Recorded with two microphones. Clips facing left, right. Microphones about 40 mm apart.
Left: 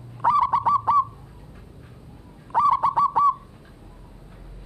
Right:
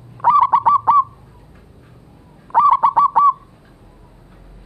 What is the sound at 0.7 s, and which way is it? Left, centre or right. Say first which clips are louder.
Owl: right 7 dB; right.